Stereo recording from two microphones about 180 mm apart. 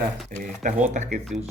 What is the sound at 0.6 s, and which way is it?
Speech, 45° right (ahead or behind).